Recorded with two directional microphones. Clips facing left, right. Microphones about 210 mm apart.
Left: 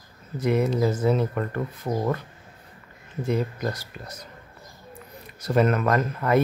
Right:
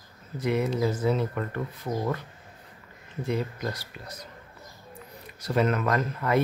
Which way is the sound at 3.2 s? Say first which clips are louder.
Left 4 dB; 45° left (ahead or behind).